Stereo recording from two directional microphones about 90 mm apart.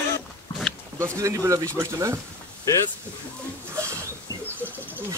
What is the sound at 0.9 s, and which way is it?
Speech, 35° right (ahead or behind).